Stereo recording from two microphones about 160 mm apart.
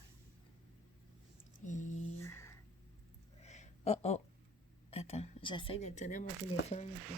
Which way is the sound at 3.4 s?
45° left (ahead or behind).